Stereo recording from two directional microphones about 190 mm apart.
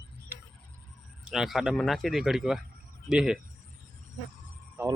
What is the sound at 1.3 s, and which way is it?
A man's voice, centre (ahead or behind).